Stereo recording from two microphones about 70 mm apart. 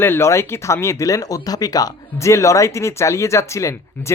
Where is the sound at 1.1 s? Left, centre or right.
Left.